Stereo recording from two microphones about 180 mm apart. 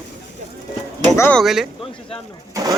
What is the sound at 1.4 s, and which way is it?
Speech, centre (ahead or behind).